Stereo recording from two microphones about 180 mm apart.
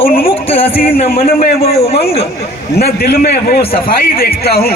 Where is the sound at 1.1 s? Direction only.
55° left (ahead or behind).